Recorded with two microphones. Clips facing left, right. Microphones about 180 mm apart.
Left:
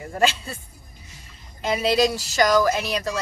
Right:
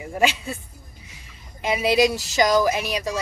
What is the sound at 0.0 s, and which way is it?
Speech, 10° right (ahead or behind).